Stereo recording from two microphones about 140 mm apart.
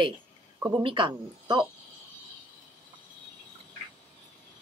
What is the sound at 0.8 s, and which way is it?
Speech, 35° right (ahead or behind).